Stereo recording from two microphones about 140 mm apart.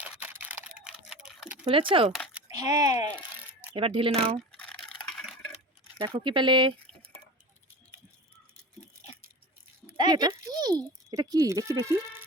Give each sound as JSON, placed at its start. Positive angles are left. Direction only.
{"t": 0.0, "sound": "camera", "side_deg": -10}
{"t": 1.0, "sound": "a sound", "side_deg": -5}
{"t": 1.6, "sound": "speech", "side_deg": -40}
{"t": 2.5, "sound": "speech", "side_deg": -25}
{"t": 3.8, "sound": "speech", "side_deg": -40}
{"t": 4.5, "sound": "a sound", "side_deg": 5}
{"t": 6.1, "sound": "speech", "side_deg": -35}
{"t": 10.0, "sound": "a child's voice", "side_deg": -30}